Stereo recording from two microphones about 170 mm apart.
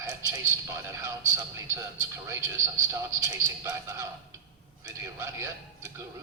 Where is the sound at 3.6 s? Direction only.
20° right (ahead or behind).